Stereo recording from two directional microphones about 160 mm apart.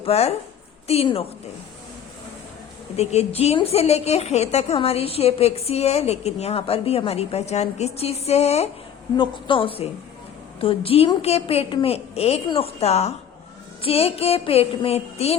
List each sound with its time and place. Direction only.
0.0 s a woman's voice: 40° left (ahead or behind)
2.9 s a woman's voice: 40° left (ahead or behind)
9.1 s a woman's voice: 30° left (ahead or behind)